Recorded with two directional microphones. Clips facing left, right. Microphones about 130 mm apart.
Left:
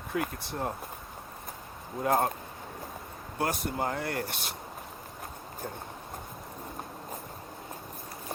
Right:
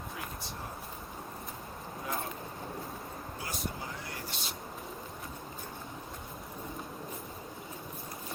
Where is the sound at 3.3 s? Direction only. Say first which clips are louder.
Left 11 dB; 60° left (ahead or behind).